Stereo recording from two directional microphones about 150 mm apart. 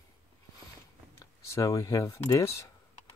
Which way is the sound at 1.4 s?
20° left (ahead or behind).